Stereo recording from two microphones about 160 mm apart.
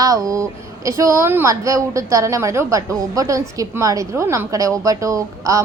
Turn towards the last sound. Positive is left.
turn(degrees=-20)  # may be behind; listen again after turning